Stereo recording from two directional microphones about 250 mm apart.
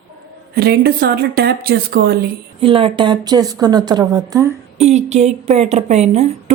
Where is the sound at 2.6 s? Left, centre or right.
Right.